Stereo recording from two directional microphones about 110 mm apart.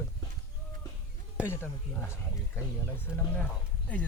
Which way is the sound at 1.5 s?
25° left (ahead or behind).